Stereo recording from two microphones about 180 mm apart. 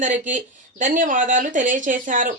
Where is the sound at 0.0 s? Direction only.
45° right (ahead or behind).